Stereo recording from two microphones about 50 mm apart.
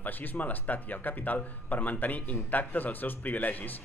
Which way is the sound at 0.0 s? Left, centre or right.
Left.